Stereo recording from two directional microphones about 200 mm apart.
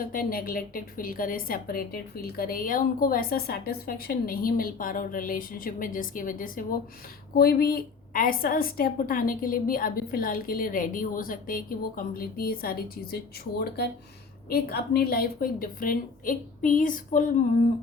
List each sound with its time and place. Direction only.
0.0 s a woman's voice: 45° left (ahead or behind)